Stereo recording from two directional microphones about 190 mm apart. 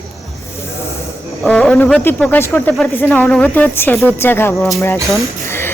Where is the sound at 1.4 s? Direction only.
5° left (ahead or behind).